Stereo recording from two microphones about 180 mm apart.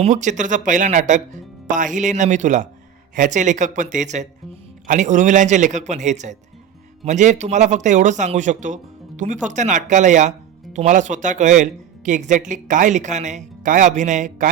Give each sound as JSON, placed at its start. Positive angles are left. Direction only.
{"t": 0.0, "sound": "speech", "side_deg": -45}